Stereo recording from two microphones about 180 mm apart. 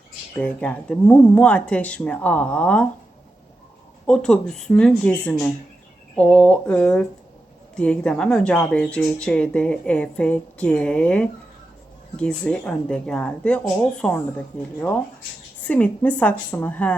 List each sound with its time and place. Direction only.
0.3 s speech: 10° left (ahead or behind)
4.0 s speech: 5° left (ahead or behind)